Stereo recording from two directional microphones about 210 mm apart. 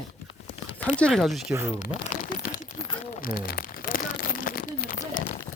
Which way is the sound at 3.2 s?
45° left (ahead or behind).